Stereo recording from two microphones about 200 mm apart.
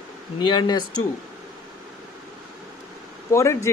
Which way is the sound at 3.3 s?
15° left (ahead or behind).